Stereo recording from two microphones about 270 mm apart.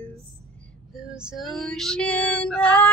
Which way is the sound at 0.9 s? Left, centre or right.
Centre.